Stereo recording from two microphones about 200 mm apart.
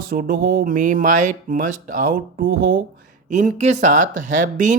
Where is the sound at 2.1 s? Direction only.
45° right (ahead or behind).